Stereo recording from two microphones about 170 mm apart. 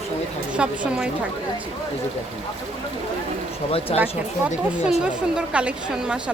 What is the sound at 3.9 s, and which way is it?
Speech, 35° left (ahead or behind).